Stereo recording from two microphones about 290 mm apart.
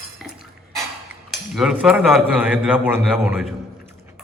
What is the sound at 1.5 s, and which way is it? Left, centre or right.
A man's voice, centre.